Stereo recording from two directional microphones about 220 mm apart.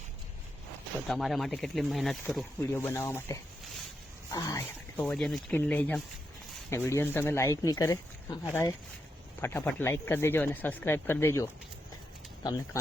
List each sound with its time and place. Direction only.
1.0 s speech: centre (ahead or behind); by 8.4 s 15° left (ahead or behind)
9.4 s speech: 10° left (ahead or behind)